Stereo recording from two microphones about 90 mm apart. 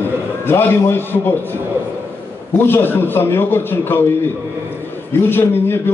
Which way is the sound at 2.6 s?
25° left (ahead or behind).